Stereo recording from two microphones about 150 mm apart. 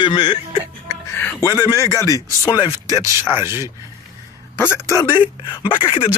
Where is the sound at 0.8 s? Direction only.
20° left (ahead or behind).